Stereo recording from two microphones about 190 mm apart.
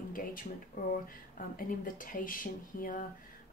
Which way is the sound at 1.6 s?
45° left (ahead or behind).